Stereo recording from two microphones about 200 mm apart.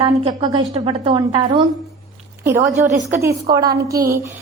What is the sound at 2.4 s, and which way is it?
A woman's voice, 10° right (ahead or behind).